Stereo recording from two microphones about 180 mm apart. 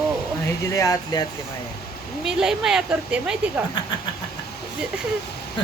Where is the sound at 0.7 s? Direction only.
20° left (ahead or behind).